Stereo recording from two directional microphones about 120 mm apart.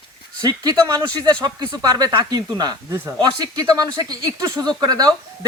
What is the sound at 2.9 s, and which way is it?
Speech, 20° right (ahead or behind).